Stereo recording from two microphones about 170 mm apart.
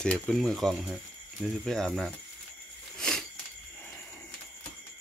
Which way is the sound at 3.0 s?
5° left (ahead or behind).